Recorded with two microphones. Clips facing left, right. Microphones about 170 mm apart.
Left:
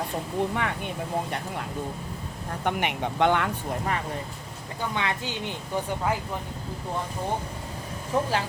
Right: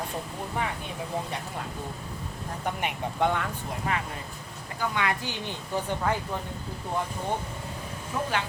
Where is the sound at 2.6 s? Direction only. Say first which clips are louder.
Left 4 dB; 75° left (ahead or behind).